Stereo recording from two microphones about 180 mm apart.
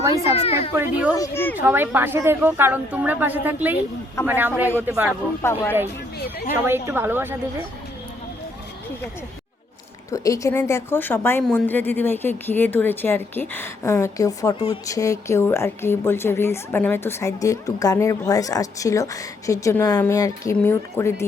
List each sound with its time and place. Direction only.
0.3 s speech: 35° left (ahead or behind)
0.8 s a woman's voice: 10° right (ahead or behind)
1.1 s a woman's voice: 15° left (ahead or behind)
1.6 s a woman's voice: 10° right (ahead or behind)
5.4 s a woman's voice: 15° left (ahead or behind)
6.1 s speech: 60° left (ahead or behind)
6.7 s a woman's voice: 15° right (ahead or behind)
10.1 s a woman's voice: 20° left (ahead or behind)